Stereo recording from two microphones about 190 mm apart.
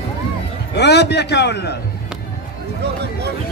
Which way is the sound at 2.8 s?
60° right (ahead or behind).